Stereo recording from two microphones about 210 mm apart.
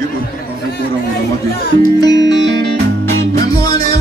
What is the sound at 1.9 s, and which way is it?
Music, 20° left (ahead or behind).